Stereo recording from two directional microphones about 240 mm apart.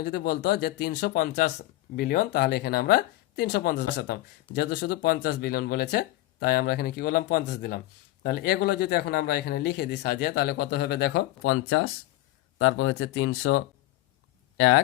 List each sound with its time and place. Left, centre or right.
0.0 s speech: left